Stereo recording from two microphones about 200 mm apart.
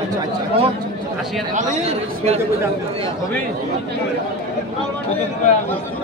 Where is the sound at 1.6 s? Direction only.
30° right (ahead or behind).